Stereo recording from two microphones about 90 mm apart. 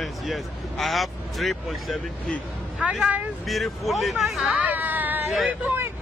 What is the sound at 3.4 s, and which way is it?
Speech, centre (ahead or behind).